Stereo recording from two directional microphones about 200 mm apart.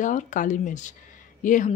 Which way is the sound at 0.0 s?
40° left (ahead or behind).